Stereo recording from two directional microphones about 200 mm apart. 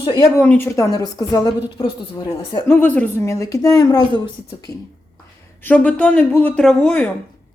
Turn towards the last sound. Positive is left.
turn(degrees=5)  # may be behind; listen again after turning